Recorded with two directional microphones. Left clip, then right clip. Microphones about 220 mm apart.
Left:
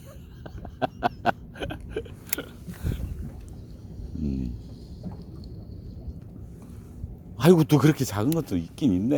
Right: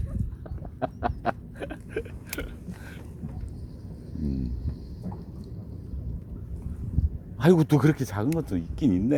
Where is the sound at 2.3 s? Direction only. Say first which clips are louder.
Left 1 dB; 45° left (ahead or behind).